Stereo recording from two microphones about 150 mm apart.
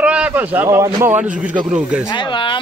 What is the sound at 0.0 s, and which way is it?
A man's voice, 5° right (ahead or behind).